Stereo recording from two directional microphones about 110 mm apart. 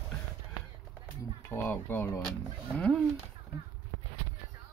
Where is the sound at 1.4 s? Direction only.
20° left (ahead or behind).